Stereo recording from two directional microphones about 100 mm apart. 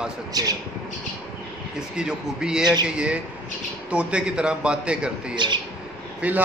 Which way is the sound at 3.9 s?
10° right (ahead or behind).